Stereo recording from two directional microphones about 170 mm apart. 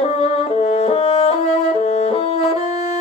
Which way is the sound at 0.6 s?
40° left (ahead or behind).